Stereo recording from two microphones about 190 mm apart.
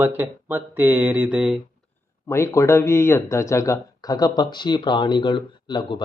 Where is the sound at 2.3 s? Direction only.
15° left (ahead or behind).